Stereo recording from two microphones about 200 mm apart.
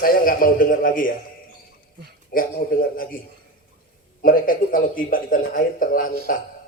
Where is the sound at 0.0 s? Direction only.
45° left (ahead or behind).